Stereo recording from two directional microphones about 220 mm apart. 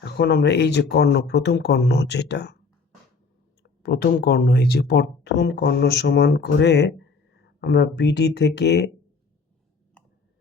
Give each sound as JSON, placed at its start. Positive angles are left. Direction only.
{"t": 0.0, "sound": "speech", "side_deg": 50}
{"t": 3.6, "sound": "speech", "side_deg": 45}